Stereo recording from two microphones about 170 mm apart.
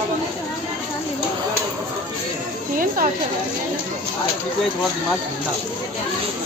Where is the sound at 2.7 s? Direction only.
55° right (ahead or behind).